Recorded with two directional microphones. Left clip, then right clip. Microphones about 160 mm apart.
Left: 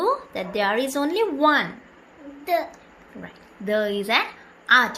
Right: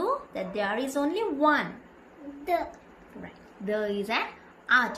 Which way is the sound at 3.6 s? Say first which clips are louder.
Left 6 dB; 45° left (ahead or behind).